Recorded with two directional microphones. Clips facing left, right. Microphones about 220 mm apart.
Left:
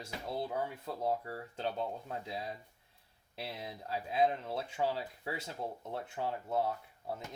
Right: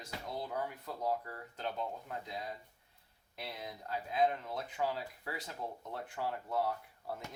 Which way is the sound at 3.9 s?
30° left (ahead or behind).